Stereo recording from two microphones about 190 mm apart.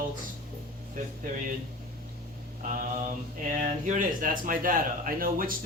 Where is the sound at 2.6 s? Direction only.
45° right (ahead or behind).